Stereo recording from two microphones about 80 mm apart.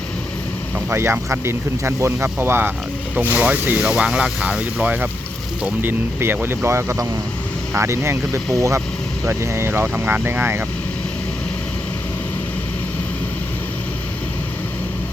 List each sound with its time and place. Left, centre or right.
0.9 s speech: right